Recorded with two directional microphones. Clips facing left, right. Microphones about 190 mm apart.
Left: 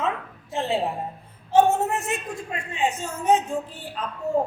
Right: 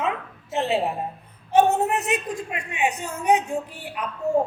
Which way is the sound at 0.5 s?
20° right (ahead or behind).